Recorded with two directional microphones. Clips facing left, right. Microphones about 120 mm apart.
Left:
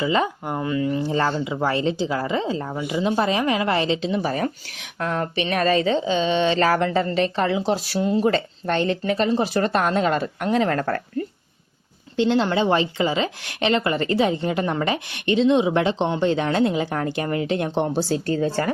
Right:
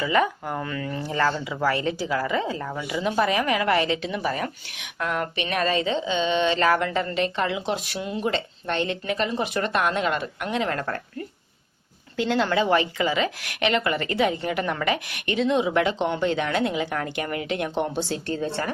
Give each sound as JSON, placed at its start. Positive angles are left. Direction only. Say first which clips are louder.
{"t": 0.0, "sound": "a woman's voice", "louder": "left 1 dB", "side_deg": 25}
{"t": 12.1, "sound": "a woman's voice", "louder": "left 3 dB", "side_deg": 25}